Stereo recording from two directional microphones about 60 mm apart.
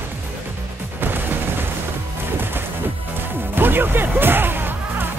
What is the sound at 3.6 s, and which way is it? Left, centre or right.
Music, right.